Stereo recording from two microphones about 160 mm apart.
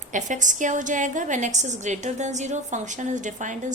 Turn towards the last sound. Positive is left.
turn(degrees=-50)  # may be behind; listen again after turning